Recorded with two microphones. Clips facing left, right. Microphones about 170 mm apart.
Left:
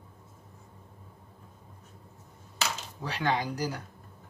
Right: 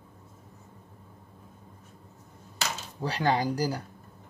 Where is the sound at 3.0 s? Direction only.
35° right (ahead or behind).